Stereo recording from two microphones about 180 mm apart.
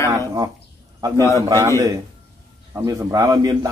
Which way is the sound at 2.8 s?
20° right (ahead or behind).